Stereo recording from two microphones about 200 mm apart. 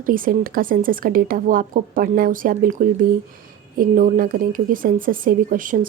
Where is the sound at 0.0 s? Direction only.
45° right (ahead or behind).